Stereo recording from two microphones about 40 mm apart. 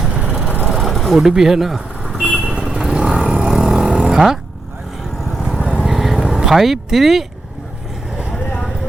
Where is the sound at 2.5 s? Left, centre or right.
Right.